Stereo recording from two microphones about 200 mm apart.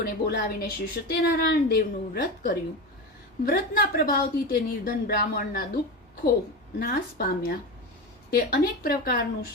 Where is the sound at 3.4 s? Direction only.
50° left (ahead or behind).